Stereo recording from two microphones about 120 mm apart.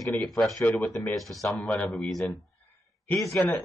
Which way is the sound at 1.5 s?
10° left (ahead or behind).